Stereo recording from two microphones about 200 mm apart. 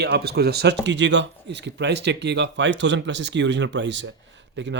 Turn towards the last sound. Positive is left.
turn(degrees=-65)  # may be behind; listen again after turning